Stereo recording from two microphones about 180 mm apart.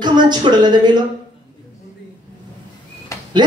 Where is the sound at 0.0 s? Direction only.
25° right (ahead or behind).